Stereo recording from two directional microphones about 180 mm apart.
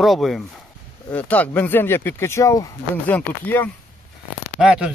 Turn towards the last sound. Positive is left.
turn(degrees=-5)  # may be behind; listen again after turning